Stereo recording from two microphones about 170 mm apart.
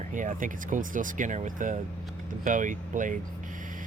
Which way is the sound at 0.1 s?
50° right (ahead or behind).